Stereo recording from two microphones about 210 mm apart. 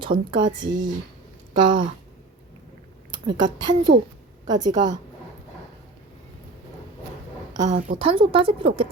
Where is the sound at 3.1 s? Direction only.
20° right (ahead or behind).